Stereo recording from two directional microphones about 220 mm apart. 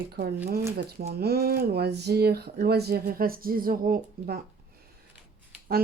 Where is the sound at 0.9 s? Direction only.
45° right (ahead or behind).